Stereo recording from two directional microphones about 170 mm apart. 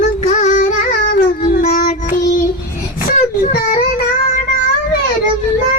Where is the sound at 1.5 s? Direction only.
45° left (ahead or behind).